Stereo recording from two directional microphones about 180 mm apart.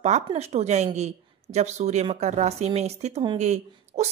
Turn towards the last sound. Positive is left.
turn(degrees=-40)  # may be behind; listen again after turning